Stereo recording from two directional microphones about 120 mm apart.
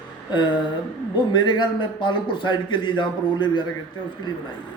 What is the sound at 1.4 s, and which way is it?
A man's voice, 40° left (ahead or behind).